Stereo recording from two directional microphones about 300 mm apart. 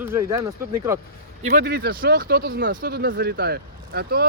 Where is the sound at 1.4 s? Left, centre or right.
Right.